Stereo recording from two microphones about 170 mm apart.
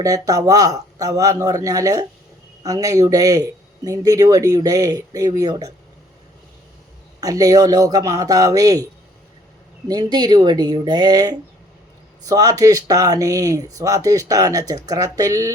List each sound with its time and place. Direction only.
0.0 s speech: 20° right (ahead or behind)
7.2 s speech: 20° right (ahead or behind)
9.9 s speech: 25° right (ahead or behind)